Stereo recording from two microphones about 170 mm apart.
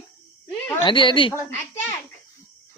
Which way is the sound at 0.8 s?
30° left (ahead or behind).